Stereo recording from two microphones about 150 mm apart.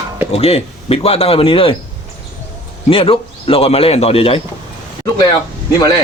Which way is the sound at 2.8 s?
35° left (ahead or behind).